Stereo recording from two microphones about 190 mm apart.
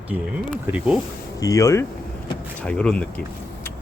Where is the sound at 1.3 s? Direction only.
15° left (ahead or behind).